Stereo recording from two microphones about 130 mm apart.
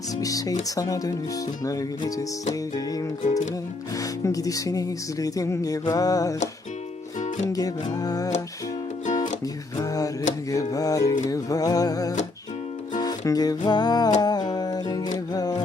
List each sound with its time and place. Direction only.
0.2 s speech: 25° left (ahead or behind)
3.2 s music: 70° left (ahead or behind)
3.9 s speech: 25° left (ahead or behind)
7.2 s music: 70° left (ahead or behind)
7.5 s speech: 30° left (ahead or behind)
9.7 s a sound: 30° left (ahead or behind)
10.5 s speech: 25° left (ahead or behind)
13.0 s music: 30° left (ahead or behind)